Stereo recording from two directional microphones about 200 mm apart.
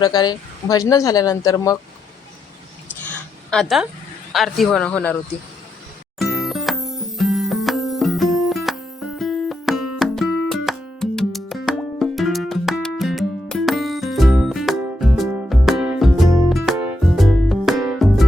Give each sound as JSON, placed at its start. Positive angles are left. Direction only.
{"t": 0.0, "sound": "speech", "side_deg": 20}
{"t": 3.5, "sound": "speech", "side_deg": 0}
{"t": 6.1, "sound": "music", "side_deg": 0}